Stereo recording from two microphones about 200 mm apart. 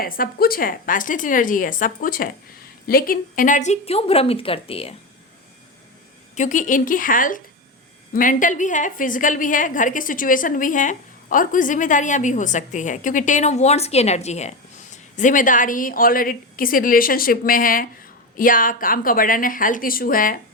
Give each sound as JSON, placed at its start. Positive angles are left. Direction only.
{"t": 0.0, "sound": "a woman's voice", "side_deg": 50}
{"t": 6.3, "sound": "a woman's voice", "side_deg": 40}